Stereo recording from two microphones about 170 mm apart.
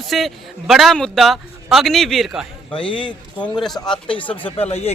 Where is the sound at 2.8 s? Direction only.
30° left (ahead or behind).